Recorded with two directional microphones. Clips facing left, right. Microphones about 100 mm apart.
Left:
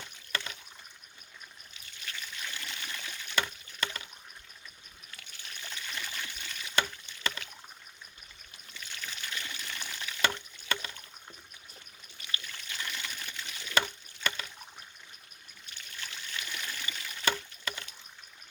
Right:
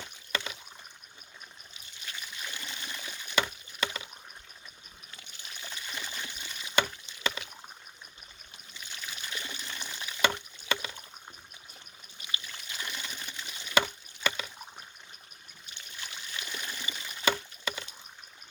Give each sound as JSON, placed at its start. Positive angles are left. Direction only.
{"t": 0.3, "sound": "rowboat", "side_deg": -15}
{"t": 2.0, "sound": "trickle", "side_deg": -15}
{"t": 5.1, "sound": "trickle", "side_deg": -15}
{"t": 7.2, "sound": "rowboat", "side_deg": -15}
{"t": 8.7, "sound": "a sound", "side_deg": -15}
{"t": 12.1, "sound": "water", "side_deg": -20}
{"t": 14.2, "sound": "a sound", "side_deg": -10}
{"t": 15.6, "sound": "water", "side_deg": -15}
{"t": 17.2, "sound": "rowboat", "side_deg": -10}